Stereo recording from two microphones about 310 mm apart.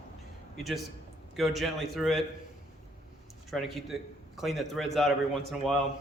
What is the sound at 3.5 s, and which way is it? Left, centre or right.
A man's voice, centre.